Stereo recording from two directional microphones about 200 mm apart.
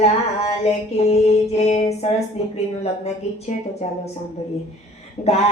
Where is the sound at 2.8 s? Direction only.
30° left (ahead or behind).